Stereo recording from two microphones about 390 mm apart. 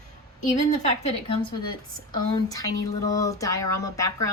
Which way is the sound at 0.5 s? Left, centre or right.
Centre.